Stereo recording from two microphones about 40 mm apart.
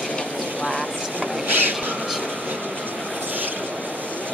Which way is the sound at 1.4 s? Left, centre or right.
Right.